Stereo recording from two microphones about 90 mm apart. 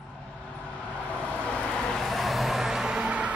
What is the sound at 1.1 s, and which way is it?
Vehicle, 15° left (ahead or behind).